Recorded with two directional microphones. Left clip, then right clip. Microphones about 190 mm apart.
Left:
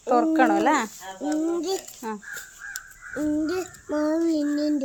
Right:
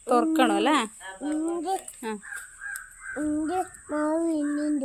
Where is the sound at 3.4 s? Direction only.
5° right (ahead or behind).